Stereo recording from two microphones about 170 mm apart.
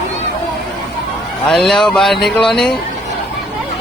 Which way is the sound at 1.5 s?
Centre (ahead or behind).